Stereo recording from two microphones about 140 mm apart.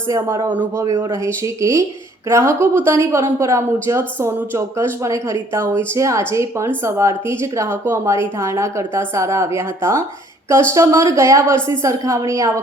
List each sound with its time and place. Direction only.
0.1 s a woman's voice: 25° right (ahead or behind)
0.5 s a man's voice: 15° right (ahead or behind)